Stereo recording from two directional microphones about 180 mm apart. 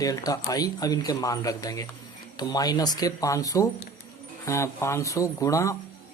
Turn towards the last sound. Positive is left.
turn(degrees=20)  # may be behind; listen again after turning